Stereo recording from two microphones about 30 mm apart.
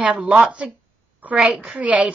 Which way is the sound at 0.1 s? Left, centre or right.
Right.